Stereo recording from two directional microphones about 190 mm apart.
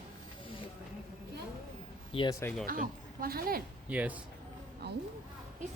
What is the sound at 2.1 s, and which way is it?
Speech, 25° left (ahead or behind).